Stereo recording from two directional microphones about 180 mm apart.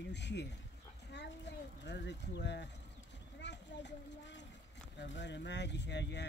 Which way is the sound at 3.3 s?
75° left (ahead or behind).